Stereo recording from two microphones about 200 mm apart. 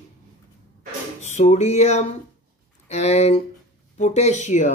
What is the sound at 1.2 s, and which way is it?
Speech, 35° left (ahead or behind).